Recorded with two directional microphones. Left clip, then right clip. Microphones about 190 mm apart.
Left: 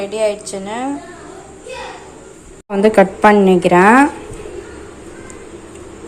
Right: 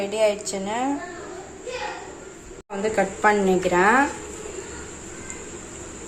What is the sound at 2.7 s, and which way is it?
A woman's voice, 45° left (ahead or behind).